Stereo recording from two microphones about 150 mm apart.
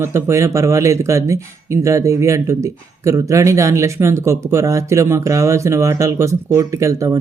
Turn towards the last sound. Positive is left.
turn(degrees=-20)  # may be behind; listen again after turning